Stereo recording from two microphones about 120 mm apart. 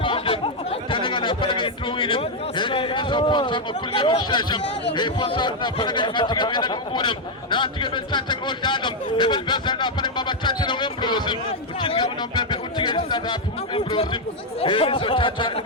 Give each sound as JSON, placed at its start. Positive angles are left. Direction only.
{"t": 0.0, "sound": "chatter", "side_deg": 50}
{"t": 4.9, "sound": "speech", "side_deg": 40}